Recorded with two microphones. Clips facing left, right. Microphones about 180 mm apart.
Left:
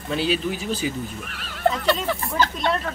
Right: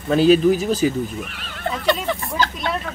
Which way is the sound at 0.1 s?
45° right (ahead or behind).